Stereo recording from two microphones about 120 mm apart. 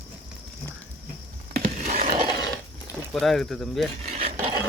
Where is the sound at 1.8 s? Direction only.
90° right.